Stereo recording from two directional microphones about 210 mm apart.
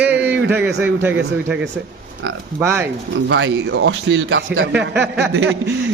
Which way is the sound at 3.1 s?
60° right (ahead or behind).